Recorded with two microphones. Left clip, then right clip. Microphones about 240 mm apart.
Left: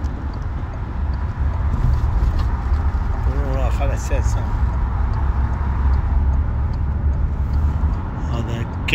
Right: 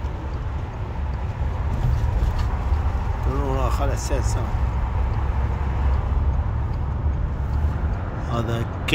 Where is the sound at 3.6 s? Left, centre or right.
Right.